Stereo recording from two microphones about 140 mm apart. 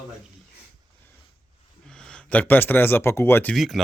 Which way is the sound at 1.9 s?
5° left (ahead or behind).